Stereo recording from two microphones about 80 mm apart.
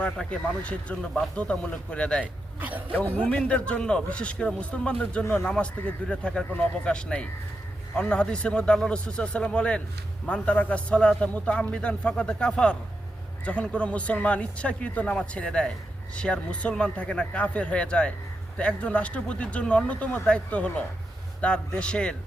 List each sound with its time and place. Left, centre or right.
0.0 s a man's voice: centre
2.2 s speech: centre
3.0 s a man's voice: centre